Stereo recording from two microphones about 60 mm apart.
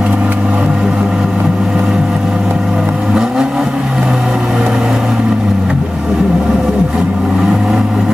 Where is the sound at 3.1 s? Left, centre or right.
Centre.